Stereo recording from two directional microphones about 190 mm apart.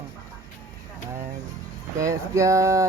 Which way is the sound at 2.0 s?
15° right (ahead or behind).